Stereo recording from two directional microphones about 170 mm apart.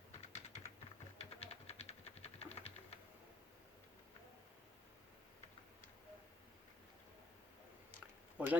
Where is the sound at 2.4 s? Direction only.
40° left (ahead or behind).